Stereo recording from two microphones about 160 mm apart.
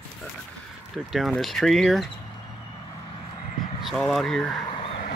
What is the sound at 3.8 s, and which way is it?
Speech, centre (ahead or behind).